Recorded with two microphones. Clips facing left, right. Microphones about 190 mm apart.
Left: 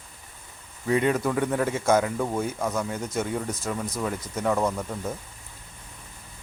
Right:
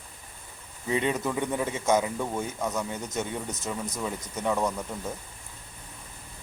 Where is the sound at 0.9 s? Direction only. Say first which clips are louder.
Left 4 dB; 20° right (ahead or behind).